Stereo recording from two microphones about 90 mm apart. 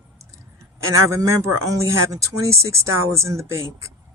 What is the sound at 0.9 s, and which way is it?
Speech, 35° right (ahead or behind).